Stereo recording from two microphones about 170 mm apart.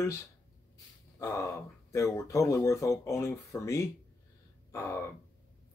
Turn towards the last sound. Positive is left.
turn(degrees=20)  # may be behind; listen again after turning